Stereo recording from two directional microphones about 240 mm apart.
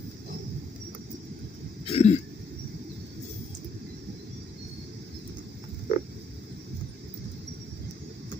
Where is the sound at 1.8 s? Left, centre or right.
Left.